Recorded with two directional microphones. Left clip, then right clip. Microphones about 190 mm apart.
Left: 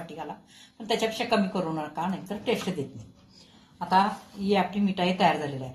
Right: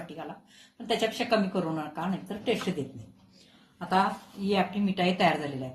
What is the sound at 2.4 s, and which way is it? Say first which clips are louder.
Speech: left 1 dB; centre (ahead or behind).